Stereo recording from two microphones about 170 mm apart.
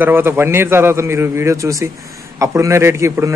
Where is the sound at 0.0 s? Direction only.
15° right (ahead or behind).